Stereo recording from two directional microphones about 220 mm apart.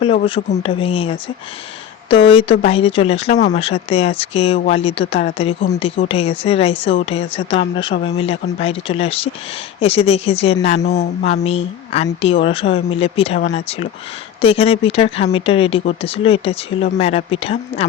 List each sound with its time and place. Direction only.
0.0 s speech: 25° left (ahead or behind)